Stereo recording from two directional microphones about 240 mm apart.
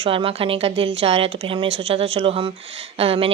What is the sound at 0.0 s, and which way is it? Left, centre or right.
Speech, right.